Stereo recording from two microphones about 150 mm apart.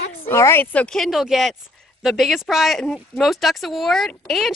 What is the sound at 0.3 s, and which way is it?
Speech, 15° left (ahead or behind).